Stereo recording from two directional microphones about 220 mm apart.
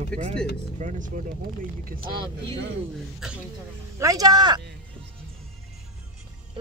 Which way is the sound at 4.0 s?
15° right (ahead or behind).